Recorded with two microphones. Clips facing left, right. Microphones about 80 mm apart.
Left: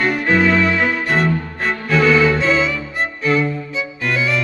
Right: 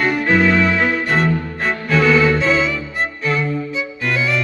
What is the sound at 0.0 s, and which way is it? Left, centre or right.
Music, centre.